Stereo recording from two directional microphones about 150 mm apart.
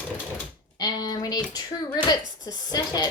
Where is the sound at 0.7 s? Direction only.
25° left (ahead or behind).